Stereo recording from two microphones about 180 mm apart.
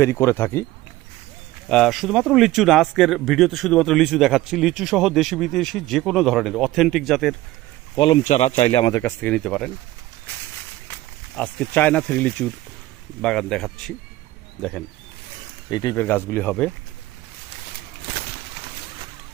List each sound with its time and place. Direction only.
0.0 s speech: 15° left (ahead or behind)
1.7 s speech: centre (ahead or behind)
7.9 s speech: 25° left (ahead or behind)
8.2 s speech: 40° left (ahead or behind)
9.0 s speech: 10° left (ahead or behind)
10.8 s speech: 10° left (ahead or behind)
15.7 s speech: 20° left (ahead or behind)